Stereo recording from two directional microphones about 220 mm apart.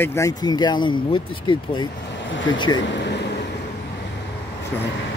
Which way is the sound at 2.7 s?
55° left (ahead or behind).